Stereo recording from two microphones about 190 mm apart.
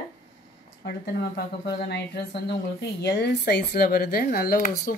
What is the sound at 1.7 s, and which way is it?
Speech, 60° left (ahead or behind).